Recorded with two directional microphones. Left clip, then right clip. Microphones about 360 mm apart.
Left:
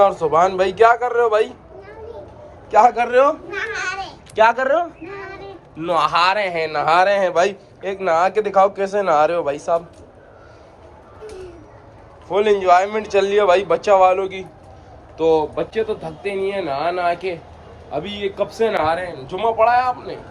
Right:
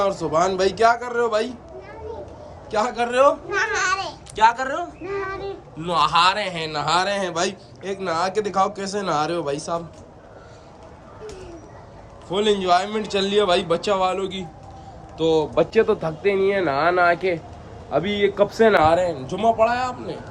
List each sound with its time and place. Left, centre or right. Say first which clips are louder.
0.0 s a man's voice: left 6 dB; centre
2.7 s a man's voice: left 7 dB; centre
3.5 s babbling: right 3 dB; right
4.4 s a man's voice: left 4 dB; centre
12.3 s a man's voice: left 5 dB; centre